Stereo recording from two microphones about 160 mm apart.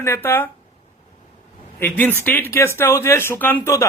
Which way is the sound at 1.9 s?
10° left (ahead or behind).